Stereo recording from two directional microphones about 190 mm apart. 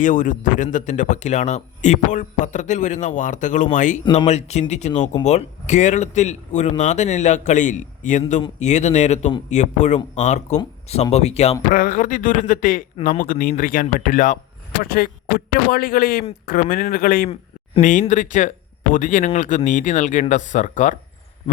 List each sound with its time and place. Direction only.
0.0 s speech: 45° left (ahead or behind)
4.0 s speech: 30° left (ahead or behind)
11.7 s speech: 45° left (ahead or behind)